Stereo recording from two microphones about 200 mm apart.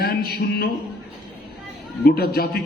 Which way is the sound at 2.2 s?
50° left (ahead or behind).